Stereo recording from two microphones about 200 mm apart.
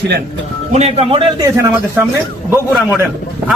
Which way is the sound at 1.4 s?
10° right (ahead or behind).